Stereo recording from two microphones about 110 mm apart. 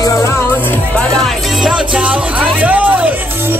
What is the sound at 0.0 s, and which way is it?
Music, 25° left (ahead or behind).